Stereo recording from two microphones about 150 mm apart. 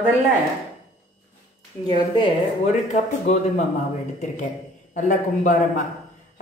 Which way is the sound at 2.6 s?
50° left (ahead or behind).